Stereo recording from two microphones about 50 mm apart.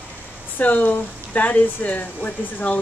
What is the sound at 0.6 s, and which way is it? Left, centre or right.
Speech, left.